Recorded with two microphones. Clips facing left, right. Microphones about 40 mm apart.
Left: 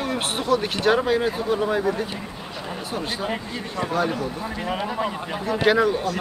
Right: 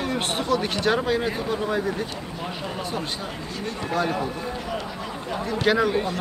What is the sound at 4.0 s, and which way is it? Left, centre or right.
Speech, centre.